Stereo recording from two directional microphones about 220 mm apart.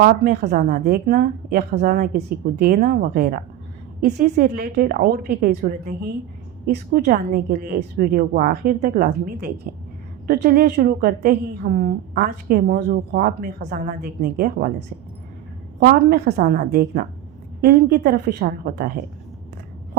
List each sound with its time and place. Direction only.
0.0 s a woman's voice: 45° right (ahead or behind)
15.8 s a woman's voice: 45° right (ahead or behind)